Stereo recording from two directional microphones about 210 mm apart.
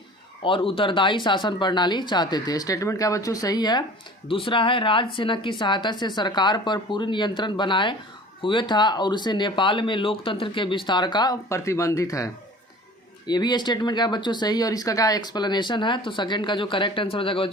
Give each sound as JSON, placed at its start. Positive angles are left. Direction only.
{"t": 0.4, "sound": "speech", "side_deg": 25}